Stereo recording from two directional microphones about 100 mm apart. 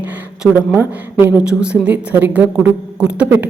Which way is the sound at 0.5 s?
20° right (ahead or behind).